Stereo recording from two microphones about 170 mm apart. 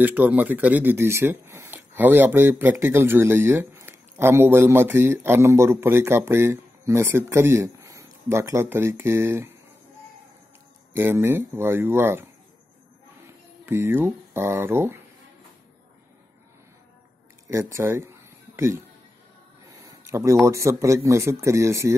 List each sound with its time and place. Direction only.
0.0 s speech: 10° right (ahead or behind)
10.9 s speech: 15° right (ahead or behind)
13.7 s speech: 15° right (ahead or behind)
17.5 s speech: 15° right (ahead or behind)